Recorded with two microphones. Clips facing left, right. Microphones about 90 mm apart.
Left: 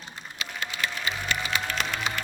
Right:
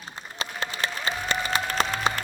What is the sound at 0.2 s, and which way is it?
Music, 35° right (ahead or behind).